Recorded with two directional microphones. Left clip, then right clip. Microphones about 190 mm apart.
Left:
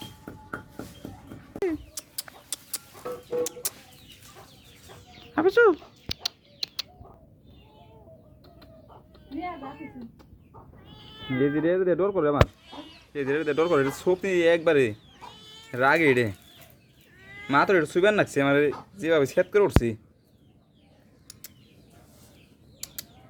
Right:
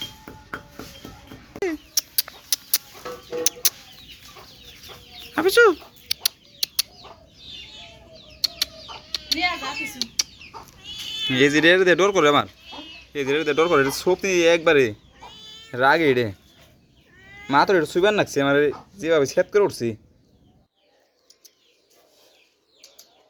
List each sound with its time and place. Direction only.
1.5 s a sound: 5° left (ahead or behind)
3.0 s chicken: 40° left (ahead or behind)
3.4 s chicken: 10° left (ahead or behind)
5.3 s chicken: centre (ahead or behind)
9.8 s a sound: 15° right (ahead or behind)
11.1 s cat: 5° right (ahead or behind)
11.3 s speech: 30° right (ahead or behind)
13.1 s speech: 10° right (ahead or behind)
17.4 s speech: 10° right (ahead or behind)